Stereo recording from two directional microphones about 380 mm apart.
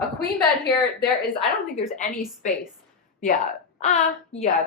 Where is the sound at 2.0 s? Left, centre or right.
Centre.